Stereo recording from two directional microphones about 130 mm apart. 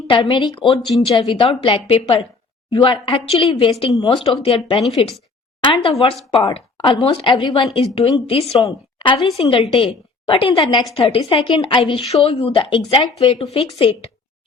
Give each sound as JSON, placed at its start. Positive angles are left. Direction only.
{"t": 0.1, "sound": "a woman's voice", "side_deg": 40}